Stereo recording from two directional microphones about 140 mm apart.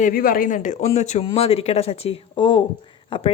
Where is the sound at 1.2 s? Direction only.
40° left (ahead or behind).